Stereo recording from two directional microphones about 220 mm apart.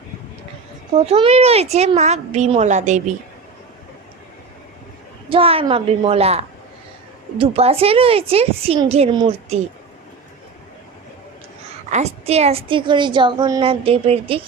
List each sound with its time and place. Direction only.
0.9 s a woman's voice: 25° right (ahead or behind)
5.3 s a woman's voice: 25° right (ahead or behind)
11.9 s a woman's voice: 30° right (ahead or behind)